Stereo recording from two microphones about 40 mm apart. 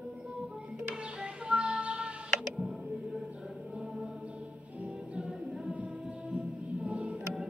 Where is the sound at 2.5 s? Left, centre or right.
Centre.